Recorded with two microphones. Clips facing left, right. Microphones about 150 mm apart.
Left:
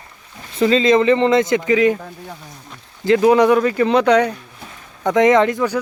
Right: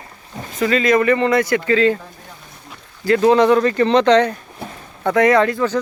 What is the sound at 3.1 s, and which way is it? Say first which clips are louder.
Speech: even; 15° left (ahead or behind).